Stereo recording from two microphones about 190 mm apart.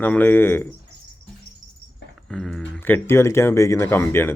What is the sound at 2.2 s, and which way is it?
Speech, centre (ahead or behind).